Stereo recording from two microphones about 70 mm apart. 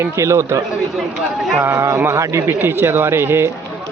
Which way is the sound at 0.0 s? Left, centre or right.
Right.